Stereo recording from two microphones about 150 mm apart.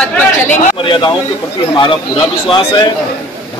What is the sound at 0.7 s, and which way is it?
A man's voice, 35° left (ahead or behind).